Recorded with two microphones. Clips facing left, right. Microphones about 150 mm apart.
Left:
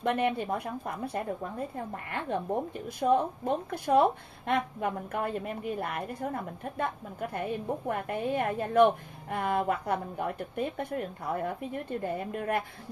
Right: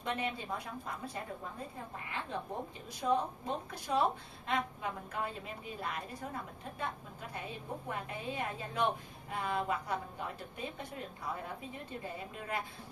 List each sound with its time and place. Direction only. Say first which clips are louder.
0.0 s a woman's voice: left 9 dB; 60° left (ahead or behind)